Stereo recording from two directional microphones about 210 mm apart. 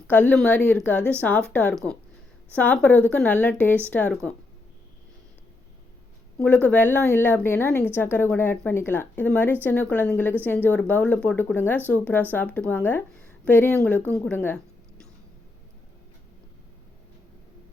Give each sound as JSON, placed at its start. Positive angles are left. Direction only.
{"t": 0.1, "sound": "speech", "side_deg": 10}
{"t": 6.4, "sound": "a woman's voice", "side_deg": 5}